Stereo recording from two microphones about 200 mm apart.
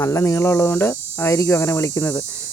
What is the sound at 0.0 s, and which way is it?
Speech, 15° left (ahead or behind).